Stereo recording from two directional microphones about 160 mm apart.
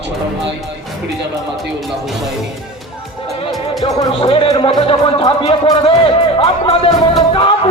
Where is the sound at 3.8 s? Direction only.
30° left (ahead or behind).